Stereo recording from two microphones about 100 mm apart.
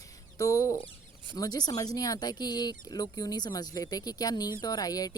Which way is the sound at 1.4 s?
40° left (ahead or behind).